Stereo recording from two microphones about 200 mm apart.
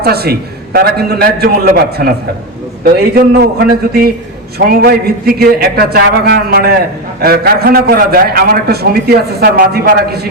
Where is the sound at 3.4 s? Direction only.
50° right (ahead or behind).